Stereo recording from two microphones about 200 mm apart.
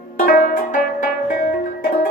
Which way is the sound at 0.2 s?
45° left (ahead or behind).